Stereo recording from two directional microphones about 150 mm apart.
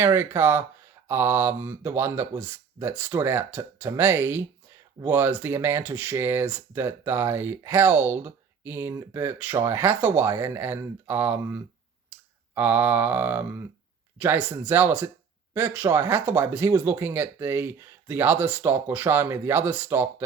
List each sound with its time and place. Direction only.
0.0 s speech: 15° right (ahead or behind)